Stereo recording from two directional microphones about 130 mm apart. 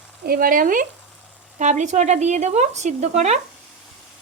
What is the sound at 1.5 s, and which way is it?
Speech, 70° right (ahead or behind).